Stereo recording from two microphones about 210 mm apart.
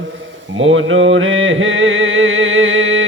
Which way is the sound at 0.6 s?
65° right (ahead or behind).